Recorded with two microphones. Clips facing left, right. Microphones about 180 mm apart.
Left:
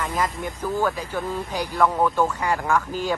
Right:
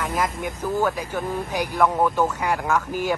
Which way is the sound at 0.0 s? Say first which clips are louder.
Right 1 dB; 5° right (ahead or behind).